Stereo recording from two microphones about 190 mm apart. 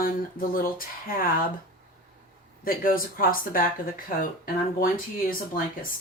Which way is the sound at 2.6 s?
50° left (ahead or behind).